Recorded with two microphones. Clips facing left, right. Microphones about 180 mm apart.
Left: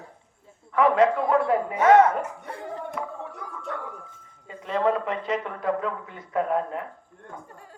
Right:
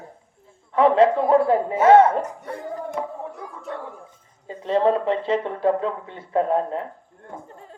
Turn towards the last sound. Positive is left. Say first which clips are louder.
# right 4 dB
turn(degrees=-30)  # may be behind; listen again after turning